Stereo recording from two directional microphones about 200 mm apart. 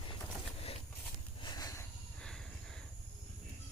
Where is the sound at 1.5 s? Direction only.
20° left (ahead or behind).